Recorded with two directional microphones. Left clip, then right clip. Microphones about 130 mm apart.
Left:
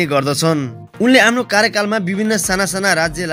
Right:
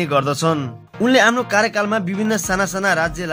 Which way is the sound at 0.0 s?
25° left (ahead or behind).